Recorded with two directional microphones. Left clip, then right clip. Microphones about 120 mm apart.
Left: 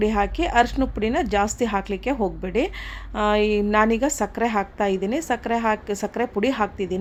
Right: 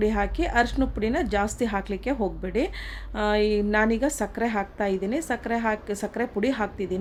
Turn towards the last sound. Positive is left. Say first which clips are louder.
# left 4 dB
turn(degrees=20)  # may be behind; listen again after turning